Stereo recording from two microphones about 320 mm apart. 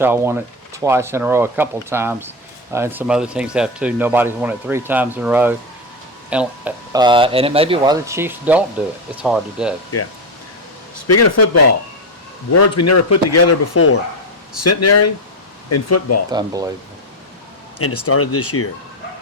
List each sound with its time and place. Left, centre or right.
0.0 s speech: centre
11.1 s speech: left
12.5 s speech: left
16.3 s speech: centre
17.7 s speech: left